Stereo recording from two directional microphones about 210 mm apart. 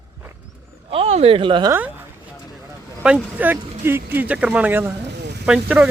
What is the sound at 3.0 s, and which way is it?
Speech, 5° right (ahead or behind).